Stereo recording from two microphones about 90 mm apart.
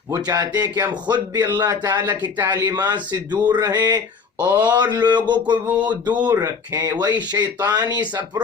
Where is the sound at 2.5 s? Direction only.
50° right (ahead or behind).